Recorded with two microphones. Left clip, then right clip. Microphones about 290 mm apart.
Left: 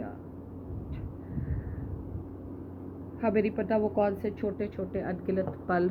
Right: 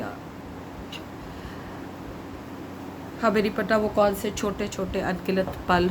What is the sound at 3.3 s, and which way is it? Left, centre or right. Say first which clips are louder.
Speech: right 3 dB; right.